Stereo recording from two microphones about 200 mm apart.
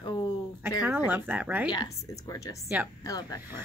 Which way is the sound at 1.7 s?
20° left (ahead or behind).